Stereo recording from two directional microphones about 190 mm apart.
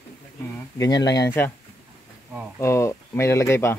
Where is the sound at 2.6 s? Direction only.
15° left (ahead or behind).